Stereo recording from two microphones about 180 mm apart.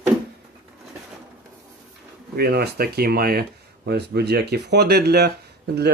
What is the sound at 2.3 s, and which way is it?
A man's voice, 60° right (ahead or behind).